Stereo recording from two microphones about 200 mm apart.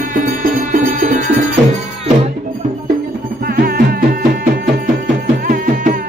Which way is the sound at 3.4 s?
50° right (ahead or behind).